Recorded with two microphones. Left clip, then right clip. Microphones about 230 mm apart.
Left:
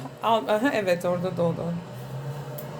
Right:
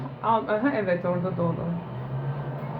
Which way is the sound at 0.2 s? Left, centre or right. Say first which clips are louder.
Left 1 dB; left.